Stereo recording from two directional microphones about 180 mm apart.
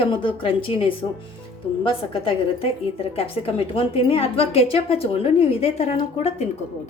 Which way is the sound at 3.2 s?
30° left (ahead or behind).